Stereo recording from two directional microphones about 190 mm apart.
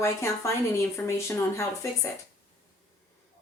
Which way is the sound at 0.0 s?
15° left (ahead or behind).